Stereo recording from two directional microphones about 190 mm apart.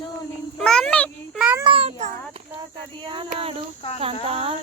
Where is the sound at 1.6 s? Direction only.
30° right (ahead or behind).